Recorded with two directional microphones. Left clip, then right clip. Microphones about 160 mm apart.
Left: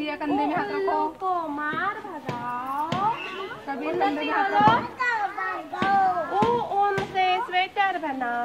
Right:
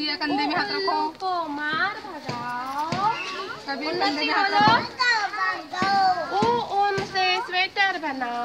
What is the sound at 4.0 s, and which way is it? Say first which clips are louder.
A child's voice: right 1 dB; centre (ahead or behind).